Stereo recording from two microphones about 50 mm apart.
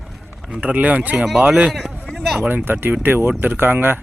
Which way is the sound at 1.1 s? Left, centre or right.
Centre.